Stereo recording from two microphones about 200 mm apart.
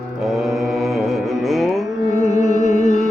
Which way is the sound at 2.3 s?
35° left (ahead or behind).